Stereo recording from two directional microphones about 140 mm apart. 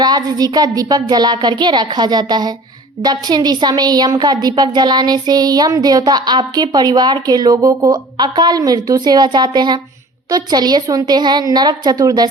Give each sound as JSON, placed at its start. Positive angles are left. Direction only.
{"t": 0.0, "sound": "a woman's voice", "side_deg": -30}